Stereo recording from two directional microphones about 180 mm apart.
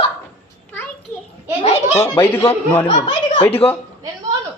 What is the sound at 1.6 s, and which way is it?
Speech, 40° left (ahead or behind).